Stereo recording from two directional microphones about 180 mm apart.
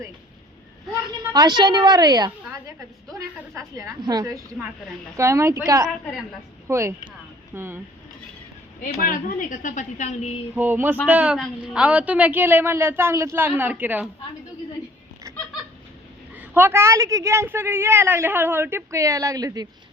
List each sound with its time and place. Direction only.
1.0 s a woman's voice: 20° right (ahead or behind)
8.8 s a woman's voice: 50° left (ahead or behind)
10.5 s a woman's voice: 10° right (ahead or behind)
16.3 s a woman's voice: 10° right (ahead or behind)